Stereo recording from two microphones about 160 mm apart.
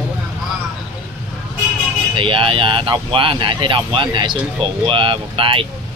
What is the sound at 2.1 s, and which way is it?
Speech, 35° right (ahead or behind).